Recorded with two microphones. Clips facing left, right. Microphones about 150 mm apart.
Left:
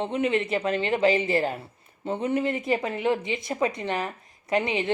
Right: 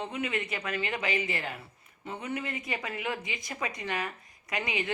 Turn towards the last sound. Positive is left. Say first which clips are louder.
# left 8 dB
turn(degrees=25)  # may be behind; listen again after turning